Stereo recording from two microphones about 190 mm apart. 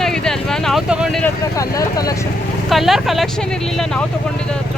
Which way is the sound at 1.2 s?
15° left (ahead or behind).